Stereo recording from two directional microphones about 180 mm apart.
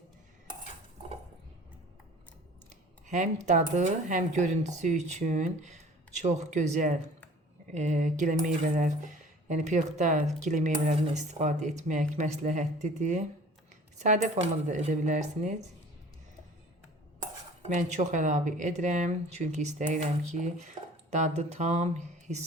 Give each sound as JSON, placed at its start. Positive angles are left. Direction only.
{"t": 3.1, "sound": "speech", "side_deg": -40}
{"t": 17.6, "sound": "speech", "side_deg": -40}